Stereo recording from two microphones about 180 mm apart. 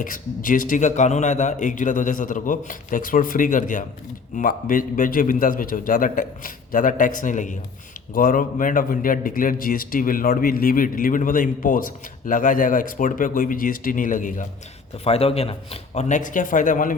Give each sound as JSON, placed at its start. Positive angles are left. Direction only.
{"t": 0.0, "sound": "a man's voice", "side_deg": 50}
{"t": 15.0, "sound": "a man's voice", "side_deg": 35}